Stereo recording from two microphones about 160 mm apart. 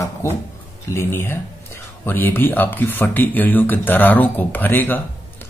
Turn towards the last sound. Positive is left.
turn(degrees=10)  # may be behind; listen again after turning